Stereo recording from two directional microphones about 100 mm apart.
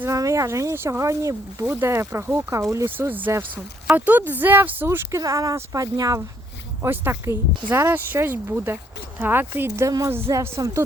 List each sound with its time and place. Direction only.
0.0 s speech: 30° right (ahead or behind)
2.9 s speech: 20° right (ahead or behind); by 6.2 s 35° right (ahead or behind)
6.8 s speech: 20° right (ahead or behind)